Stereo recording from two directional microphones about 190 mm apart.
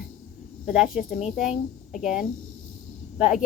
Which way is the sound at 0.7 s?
5° right (ahead or behind).